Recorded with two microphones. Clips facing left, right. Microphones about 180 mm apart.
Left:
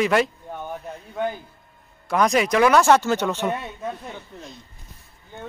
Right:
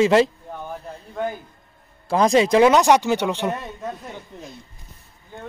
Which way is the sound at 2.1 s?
25° right (ahead or behind).